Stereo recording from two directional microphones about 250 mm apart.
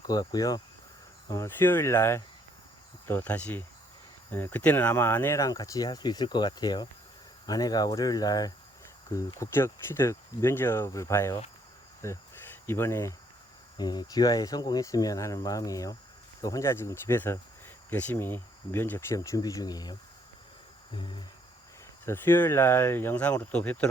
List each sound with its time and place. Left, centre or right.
0.1 s speech: centre
20.9 s a sound: centre
22.0 s speech: centre